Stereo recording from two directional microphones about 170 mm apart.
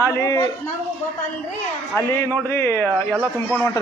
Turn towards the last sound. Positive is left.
turn(degrees=0)  # may be behind; listen again after turning